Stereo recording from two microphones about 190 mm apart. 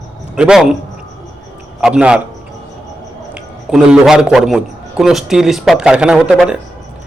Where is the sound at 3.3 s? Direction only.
5° right (ahead or behind).